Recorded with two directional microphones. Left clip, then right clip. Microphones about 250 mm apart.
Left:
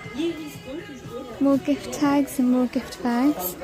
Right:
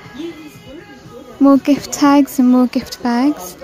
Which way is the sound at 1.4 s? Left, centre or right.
Right.